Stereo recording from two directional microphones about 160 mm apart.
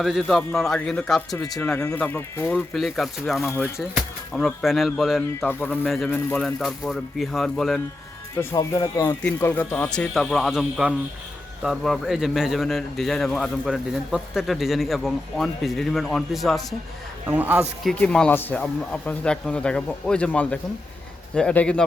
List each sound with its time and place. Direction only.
0.0 s a man's voice: centre (ahead or behind)
2.6 s a man's voice: centre (ahead or behind)
5.5 s a man's voice: 10° left (ahead or behind)
8.4 s a man's voice: 20° left (ahead or behind); by 16.6 s centre (ahead or behind)
17.2 s a man's voice: 10° right (ahead or behind)
17.8 s speech: 5° left (ahead or behind)